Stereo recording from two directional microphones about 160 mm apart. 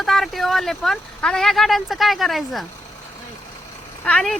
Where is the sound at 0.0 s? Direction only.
Centre (ahead or behind).